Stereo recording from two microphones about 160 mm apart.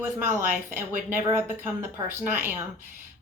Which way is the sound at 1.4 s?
15° right (ahead or behind).